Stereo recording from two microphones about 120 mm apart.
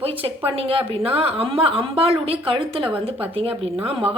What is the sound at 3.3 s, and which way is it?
Speech, 50° right (ahead or behind).